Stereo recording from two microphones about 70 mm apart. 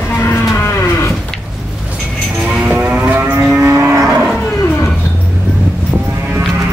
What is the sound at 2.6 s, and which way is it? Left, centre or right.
Moo, right.